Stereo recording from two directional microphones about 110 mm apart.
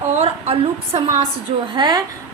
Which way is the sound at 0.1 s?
65° right (ahead or behind).